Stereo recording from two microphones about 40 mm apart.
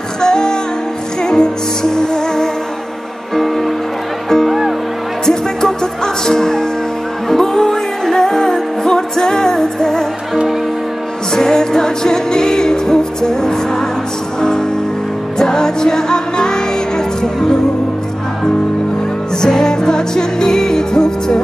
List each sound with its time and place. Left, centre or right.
0.2 s music: centre
3.3 s music: centre
11.3 s music: centre
15.3 s music: centre
19.4 s music: centre